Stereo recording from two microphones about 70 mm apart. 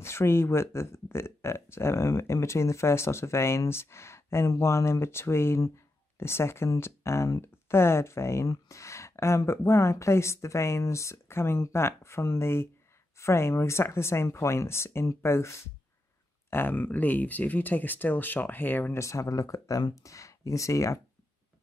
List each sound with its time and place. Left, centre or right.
0.0 s speech: left
7.4 s speech: left
16.4 s speech: left
18.9 s speech: left